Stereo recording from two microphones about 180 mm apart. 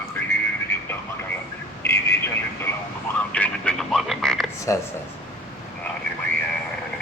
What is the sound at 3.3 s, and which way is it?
Radio, 5° left (ahead or behind).